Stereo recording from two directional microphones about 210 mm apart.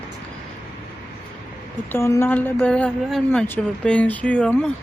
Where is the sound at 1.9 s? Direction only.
10° left (ahead or behind).